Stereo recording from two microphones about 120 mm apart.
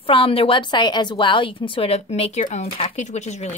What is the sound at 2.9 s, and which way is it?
Speech, 75° left (ahead or behind).